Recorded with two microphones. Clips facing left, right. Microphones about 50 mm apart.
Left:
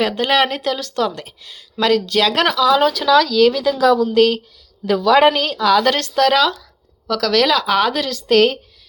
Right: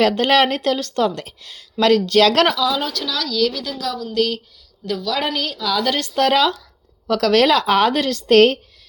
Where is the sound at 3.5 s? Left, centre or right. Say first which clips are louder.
Left 11 dB; left.